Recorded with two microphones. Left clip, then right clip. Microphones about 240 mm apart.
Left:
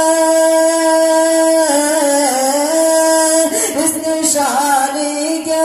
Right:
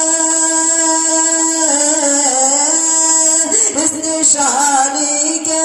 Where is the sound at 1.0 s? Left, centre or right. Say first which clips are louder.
Left 5 dB; right.